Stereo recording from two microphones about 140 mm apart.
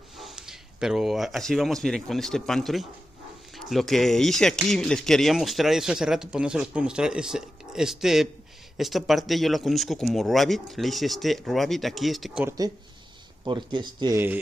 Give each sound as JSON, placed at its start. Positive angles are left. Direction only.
{"t": 0.2, "sound": "speech", "side_deg": -5}
{"t": 12.4, "sound": "speech", "side_deg": -25}
{"t": 14.1, "sound": "speech", "side_deg": -15}